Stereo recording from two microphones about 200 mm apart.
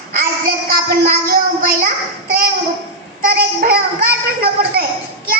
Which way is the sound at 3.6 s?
50° right (ahead or behind).